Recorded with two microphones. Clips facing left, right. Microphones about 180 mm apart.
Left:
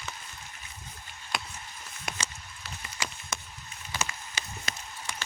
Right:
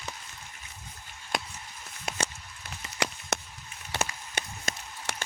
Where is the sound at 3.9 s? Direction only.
60° right (ahead or behind).